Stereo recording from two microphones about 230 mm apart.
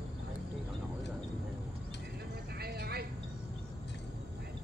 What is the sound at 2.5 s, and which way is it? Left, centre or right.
Vehicle, right.